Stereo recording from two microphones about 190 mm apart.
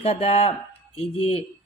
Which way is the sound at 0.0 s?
30° left (ahead or behind).